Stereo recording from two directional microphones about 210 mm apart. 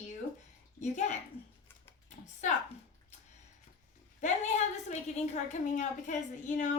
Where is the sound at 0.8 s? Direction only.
35° left (ahead or behind).